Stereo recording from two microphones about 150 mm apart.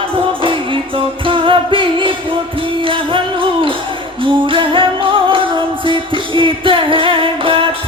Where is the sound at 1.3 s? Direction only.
35° right (ahead or behind).